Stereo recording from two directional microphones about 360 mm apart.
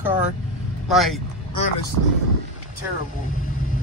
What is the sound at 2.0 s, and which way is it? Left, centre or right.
Speech, right.